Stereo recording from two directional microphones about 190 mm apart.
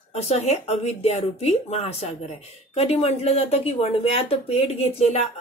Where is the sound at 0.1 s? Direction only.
35° left (ahead or behind).